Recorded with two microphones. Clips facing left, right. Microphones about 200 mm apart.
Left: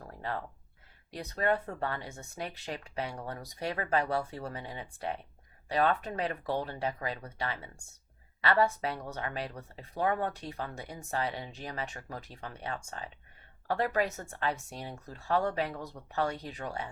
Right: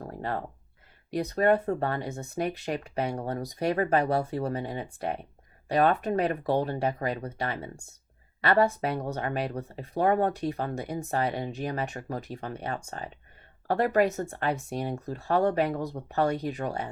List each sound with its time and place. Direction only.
0.2 s speech: 50° right (ahead or behind)
2.6 s speech: 50° right (ahead or behind)
3.2 s speech: 40° right (ahead or behind)
3.6 s speech: 50° right (ahead or behind)
14.1 s speech: 35° right (ahead or behind)
14.3 s speech: 55° right (ahead or behind)